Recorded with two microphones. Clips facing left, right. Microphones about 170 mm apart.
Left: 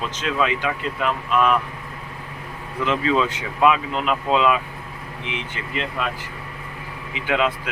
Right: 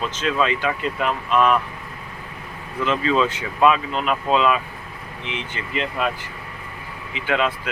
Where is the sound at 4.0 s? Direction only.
15° right (ahead or behind).